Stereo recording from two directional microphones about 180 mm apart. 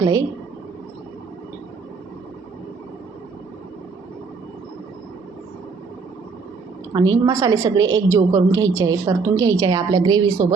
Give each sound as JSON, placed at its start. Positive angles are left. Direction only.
{"t": 0.0, "sound": "a woman's voice", "side_deg": -20}
{"t": 6.9, "sound": "a woman's voice", "side_deg": -20}